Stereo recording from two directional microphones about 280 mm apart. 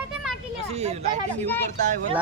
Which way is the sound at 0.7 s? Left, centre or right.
Right.